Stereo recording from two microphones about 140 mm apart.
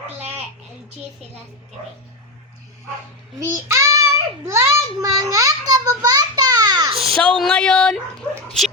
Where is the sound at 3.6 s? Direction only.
20° right (ahead or behind).